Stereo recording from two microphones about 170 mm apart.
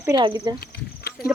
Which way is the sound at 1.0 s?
70° left (ahead or behind).